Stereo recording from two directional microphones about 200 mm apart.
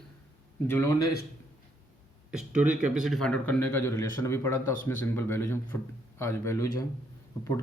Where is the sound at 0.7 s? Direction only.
15° left (ahead or behind).